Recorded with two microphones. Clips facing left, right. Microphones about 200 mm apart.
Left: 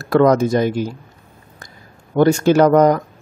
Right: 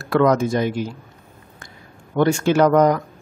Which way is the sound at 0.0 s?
40° left (ahead or behind).